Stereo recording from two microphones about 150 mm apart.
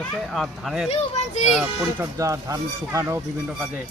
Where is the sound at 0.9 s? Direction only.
45° left (ahead or behind).